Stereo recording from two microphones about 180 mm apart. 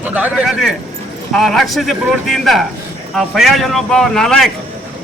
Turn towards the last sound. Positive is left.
turn(degrees=0)  # may be behind; listen again after turning